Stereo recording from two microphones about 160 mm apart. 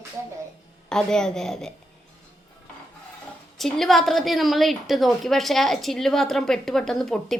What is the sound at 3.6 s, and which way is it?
A woman's voice, centre (ahead or behind).